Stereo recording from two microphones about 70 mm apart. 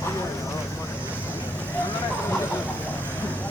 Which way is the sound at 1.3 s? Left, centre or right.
Left.